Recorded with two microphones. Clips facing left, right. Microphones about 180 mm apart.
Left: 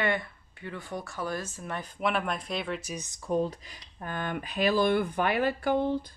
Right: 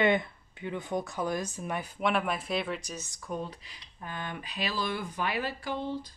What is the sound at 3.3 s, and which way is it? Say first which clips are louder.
Speech: left 8 dB; 30° left (ahead or behind).